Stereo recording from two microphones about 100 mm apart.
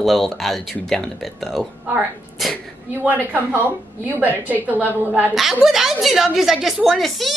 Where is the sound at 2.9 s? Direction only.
20° right (ahead or behind).